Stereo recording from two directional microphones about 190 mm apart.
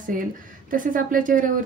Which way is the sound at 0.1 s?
45° right (ahead or behind).